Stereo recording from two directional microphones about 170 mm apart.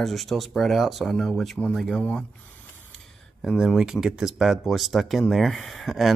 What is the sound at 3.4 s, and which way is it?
Speech, centre (ahead or behind).